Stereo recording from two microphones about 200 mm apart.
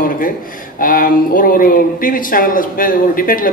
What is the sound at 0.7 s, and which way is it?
Speech, 45° left (ahead or behind).